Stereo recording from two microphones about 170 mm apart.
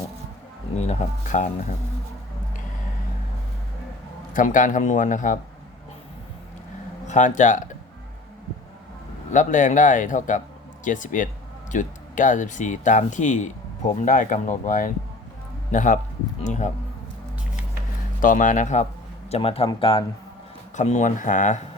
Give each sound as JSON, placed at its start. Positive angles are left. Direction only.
{"t": 0.8, "sound": "speech", "side_deg": 45}
{"t": 4.4, "sound": "speech", "side_deg": 50}
{"t": 7.1, "sound": "speech", "side_deg": 45}
{"t": 9.3, "sound": "speech", "side_deg": 50}
{"t": 18.2, "sound": "speech", "side_deg": 50}
{"t": 19.3, "sound": "speech", "side_deg": 35}
{"t": 20.7, "sound": "speech", "side_deg": 45}